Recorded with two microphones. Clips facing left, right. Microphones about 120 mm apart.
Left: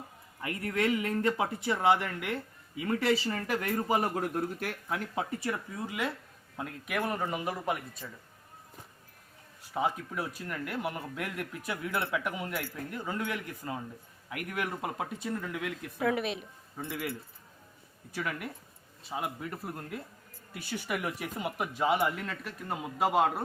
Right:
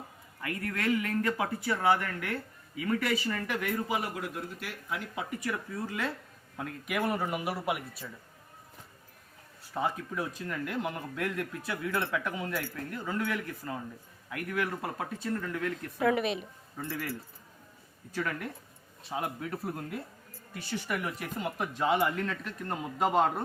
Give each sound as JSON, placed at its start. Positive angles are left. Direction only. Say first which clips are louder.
{"t": 0.4, "sound": "speech", "louder": "left 2 dB", "side_deg": 25}
{"t": 5.7, "sound": "speech", "louder": "even", "side_deg": 15}
{"t": 6.6, "sound": "speech", "louder": "right 1 dB", "side_deg": 0}
{"t": 9.7, "sound": "speech", "louder": "left 1 dB", "side_deg": 10}
{"t": 16.7, "sound": "speech", "louder": "even", "side_deg": 15}
{"t": 20.5, "sound": "speech", "louder": "right 1 dB", "side_deg": 10}